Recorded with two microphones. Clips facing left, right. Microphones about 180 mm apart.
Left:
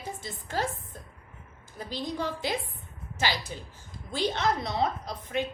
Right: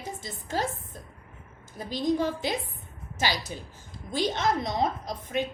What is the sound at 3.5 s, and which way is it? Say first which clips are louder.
A woman's voice: right 1 dB; 15° right (ahead or behind).